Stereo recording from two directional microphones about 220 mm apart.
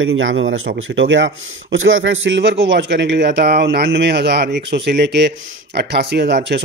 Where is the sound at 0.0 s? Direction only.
65° right (ahead or behind).